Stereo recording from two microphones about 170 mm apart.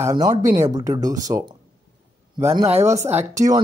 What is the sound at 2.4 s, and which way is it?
Speech, 20° right (ahead or behind).